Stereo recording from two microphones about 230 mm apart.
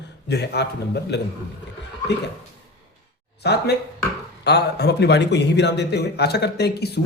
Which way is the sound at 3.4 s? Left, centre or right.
Left.